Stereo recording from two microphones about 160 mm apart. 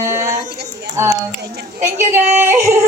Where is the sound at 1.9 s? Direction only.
15° right (ahead or behind).